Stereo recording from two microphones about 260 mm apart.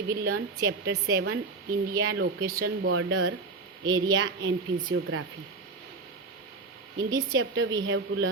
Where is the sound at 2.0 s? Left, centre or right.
Right.